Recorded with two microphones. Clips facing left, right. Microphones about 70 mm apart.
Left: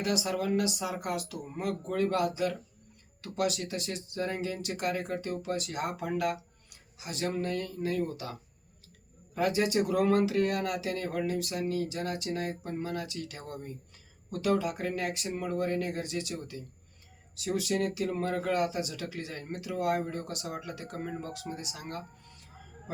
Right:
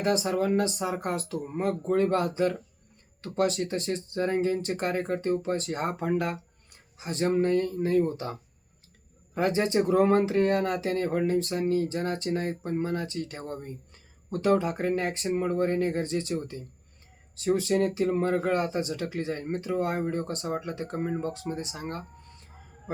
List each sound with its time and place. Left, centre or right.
0.0 s speech: right